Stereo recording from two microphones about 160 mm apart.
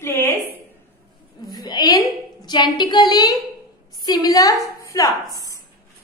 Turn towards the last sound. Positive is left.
turn(degrees=20)  # may be behind; listen again after turning